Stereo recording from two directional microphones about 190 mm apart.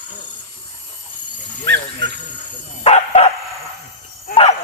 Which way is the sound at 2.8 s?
35° left (ahead or behind).